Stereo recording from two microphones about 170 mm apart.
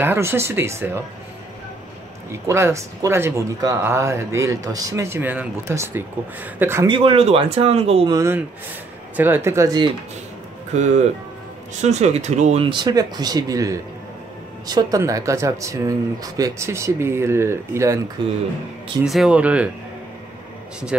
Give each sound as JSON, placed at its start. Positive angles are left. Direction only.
{"t": 0.0, "sound": "speech", "side_deg": -15}
{"t": 2.4, "sound": "speech", "side_deg": -15}
{"t": 6.9, "sound": "speech", "side_deg": -35}
{"t": 8.1, "sound": "speech", "side_deg": -15}
{"t": 10.7, "sound": "speech", "side_deg": -45}
{"t": 12.6, "sound": "speech", "side_deg": -25}
{"t": 19.0, "sound": "speech", "side_deg": -5}